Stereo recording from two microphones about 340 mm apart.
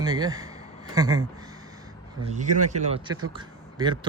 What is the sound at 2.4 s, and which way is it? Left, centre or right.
Speech, right.